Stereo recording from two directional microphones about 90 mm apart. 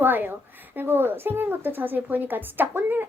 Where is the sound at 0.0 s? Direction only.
20° right (ahead or behind).